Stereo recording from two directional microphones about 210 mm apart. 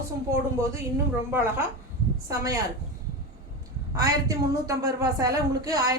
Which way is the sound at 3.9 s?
15° right (ahead or behind).